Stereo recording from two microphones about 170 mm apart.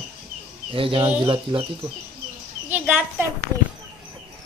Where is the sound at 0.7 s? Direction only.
30° right (ahead or behind).